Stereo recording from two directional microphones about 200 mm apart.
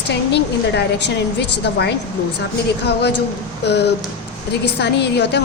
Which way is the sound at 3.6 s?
55° left (ahead or behind).